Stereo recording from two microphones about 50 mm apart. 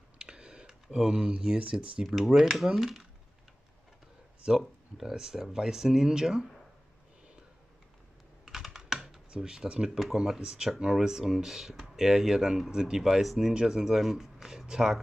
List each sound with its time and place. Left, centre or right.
0.2 s a sound: centre
1.6 s speech: centre
2.0 s speech: centre
4.6 s speech: centre
8.5 s computer keyboard: centre
9.3 s speech: centre